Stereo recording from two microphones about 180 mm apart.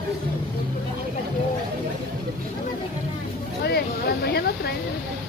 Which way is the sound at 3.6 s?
65° left (ahead or behind).